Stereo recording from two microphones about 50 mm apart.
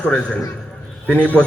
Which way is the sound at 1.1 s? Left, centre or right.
Left.